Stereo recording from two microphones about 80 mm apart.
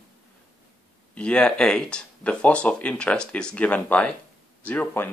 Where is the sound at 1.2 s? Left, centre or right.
Centre.